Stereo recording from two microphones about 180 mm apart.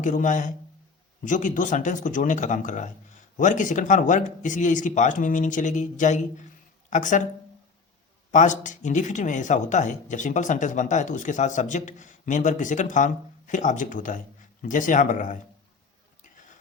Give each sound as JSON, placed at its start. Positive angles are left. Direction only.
{"t": 0.0, "sound": "speech", "side_deg": 45}
{"t": 8.3, "sound": "speech", "side_deg": 45}
{"t": 16.2, "sound": "a sound", "side_deg": 45}